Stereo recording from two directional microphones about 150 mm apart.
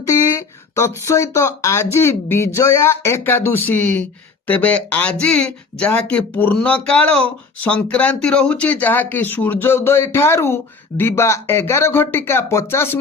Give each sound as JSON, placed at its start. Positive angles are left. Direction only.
{"t": 0.8, "sound": "speech", "side_deg": 20}